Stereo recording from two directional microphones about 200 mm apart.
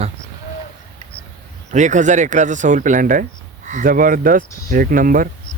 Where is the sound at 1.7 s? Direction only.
35° right (ahead or behind).